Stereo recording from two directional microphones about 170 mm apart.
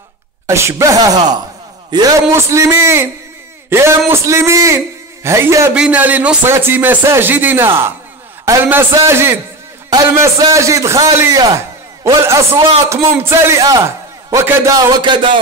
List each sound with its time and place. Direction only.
0.5 s a man's voice: 15° right (ahead or behind)